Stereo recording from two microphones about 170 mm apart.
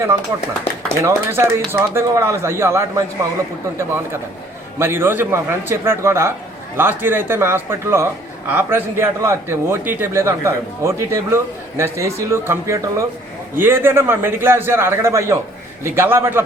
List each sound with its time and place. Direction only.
1.0 s a man's voice: 15° right (ahead or behind)